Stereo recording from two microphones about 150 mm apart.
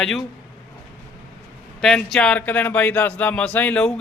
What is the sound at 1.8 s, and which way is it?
Speech, 5° left (ahead or behind).